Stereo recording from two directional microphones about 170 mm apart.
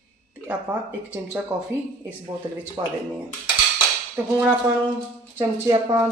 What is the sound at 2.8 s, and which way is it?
Speech, 25° right (ahead or behind).